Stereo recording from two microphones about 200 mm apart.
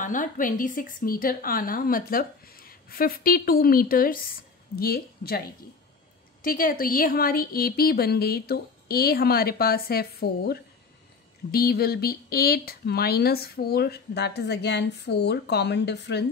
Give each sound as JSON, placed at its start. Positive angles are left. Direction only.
{"t": 0.0, "sound": "a woman's voice", "side_deg": 40}
{"t": 6.4, "sound": "a woman's voice", "side_deg": 45}